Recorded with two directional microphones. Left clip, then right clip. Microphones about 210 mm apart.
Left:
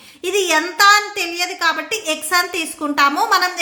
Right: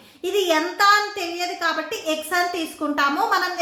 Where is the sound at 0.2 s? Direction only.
30° left (ahead or behind).